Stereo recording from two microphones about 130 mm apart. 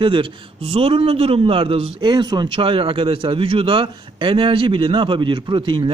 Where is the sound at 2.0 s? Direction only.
35° right (ahead or behind).